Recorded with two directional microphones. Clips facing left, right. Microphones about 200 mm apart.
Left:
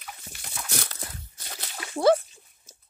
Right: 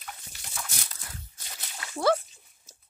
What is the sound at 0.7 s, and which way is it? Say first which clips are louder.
Walk: left 9 dB; 75° left (ahead or behind).